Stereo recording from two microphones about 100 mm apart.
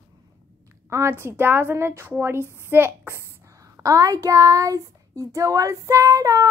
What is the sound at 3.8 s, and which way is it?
A woman's voice, 35° right (ahead or behind).